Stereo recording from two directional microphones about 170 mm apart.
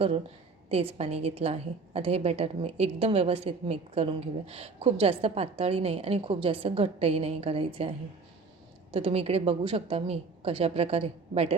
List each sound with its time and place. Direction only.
0.7 s a woman's voice: 35° right (ahead or behind)